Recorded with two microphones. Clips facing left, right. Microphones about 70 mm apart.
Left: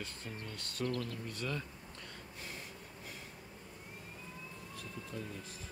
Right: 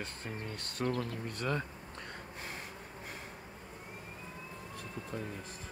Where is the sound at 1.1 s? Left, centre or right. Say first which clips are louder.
Right 5 dB; right.